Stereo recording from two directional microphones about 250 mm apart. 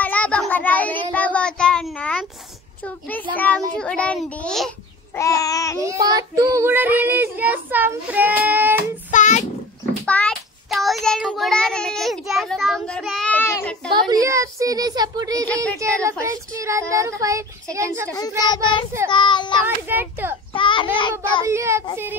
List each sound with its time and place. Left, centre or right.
0.0 s child singing: centre
2.8 s a child's voice: centre
5.8 s child singing: centre
9.1 s child singing: left
10.0 s child singing: centre
13.9 s child singing: centre
18.4 s a child's voice: centre
19.0 s child singing: centre
19.6 s child singing: centre
20.5 s a child's voice: centre
21.5 s child singing: centre